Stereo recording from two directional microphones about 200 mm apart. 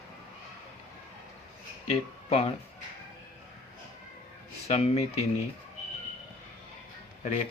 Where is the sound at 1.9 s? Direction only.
30° left (ahead or behind).